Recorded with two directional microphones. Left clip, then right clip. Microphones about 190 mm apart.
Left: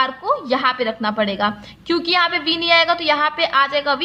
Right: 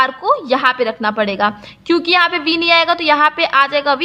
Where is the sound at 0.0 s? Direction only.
25° right (ahead or behind).